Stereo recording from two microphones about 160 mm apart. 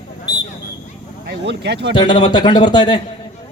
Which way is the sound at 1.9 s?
30° left (ahead or behind).